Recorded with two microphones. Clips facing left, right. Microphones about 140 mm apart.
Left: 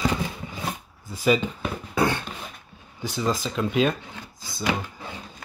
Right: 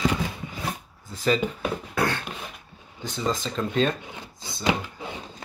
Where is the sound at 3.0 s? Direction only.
5° left (ahead or behind).